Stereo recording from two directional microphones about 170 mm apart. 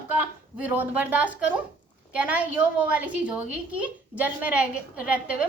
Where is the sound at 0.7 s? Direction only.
10° right (ahead or behind).